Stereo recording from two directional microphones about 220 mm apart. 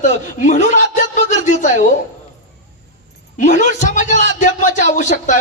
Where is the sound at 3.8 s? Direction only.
30° left (ahead or behind).